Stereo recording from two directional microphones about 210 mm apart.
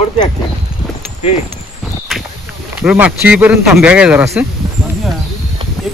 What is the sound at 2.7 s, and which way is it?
Speech, 10° right (ahead or behind).